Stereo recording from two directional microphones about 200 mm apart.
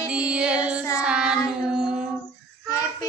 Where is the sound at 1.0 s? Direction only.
5° right (ahead or behind).